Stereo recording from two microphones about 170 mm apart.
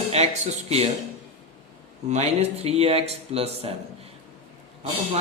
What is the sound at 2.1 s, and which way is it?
A man's voice, 40° right (ahead or behind).